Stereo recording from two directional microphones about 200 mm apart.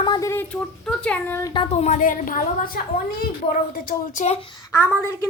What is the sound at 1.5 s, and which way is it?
A child's voice, 30° left (ahead or behind).